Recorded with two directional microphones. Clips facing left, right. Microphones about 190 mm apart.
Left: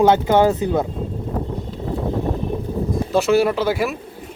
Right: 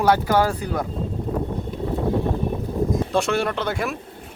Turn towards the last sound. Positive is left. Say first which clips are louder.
# left 5 dB
turn(degrees=5)  # may be behind; listen again after turning